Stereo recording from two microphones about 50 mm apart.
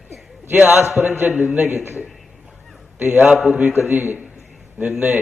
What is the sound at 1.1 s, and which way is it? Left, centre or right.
Speech, right.